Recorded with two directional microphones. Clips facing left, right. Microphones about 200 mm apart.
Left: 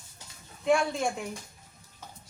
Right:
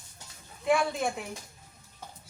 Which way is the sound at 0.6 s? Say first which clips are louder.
Left 1 dB; centre (ahead or behind).